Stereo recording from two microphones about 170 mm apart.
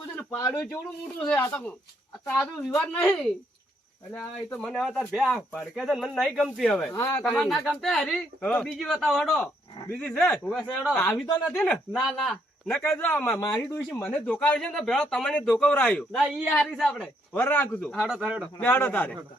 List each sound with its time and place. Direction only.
0.2 s a man's voice: 15° left (ahead or behind)
6.9 s speech: 20° left (ahead or behind)
7.3 s a man's voice: 5° left (ahead or behind)
16.2 s a man's voice: 10° right (ahead or behind); by 17.7 s 10° left (ahead or behind)
17.9 s speech: 5° right (ahead or behind)
18.6 s a man's voice: 10° left (ahead or behind)